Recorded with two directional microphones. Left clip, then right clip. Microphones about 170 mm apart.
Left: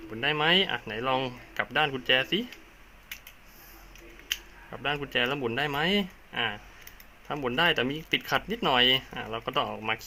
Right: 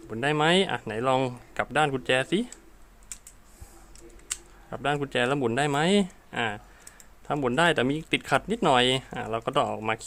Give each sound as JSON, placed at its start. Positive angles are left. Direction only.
{"t": 0.1, "sound": "speech", "side_deg": -60}
{"t": 4.7, "sound": "speech", "side_deg": -65}